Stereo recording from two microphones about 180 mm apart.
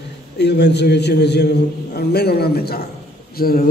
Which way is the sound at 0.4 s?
70° left (ahead or behind).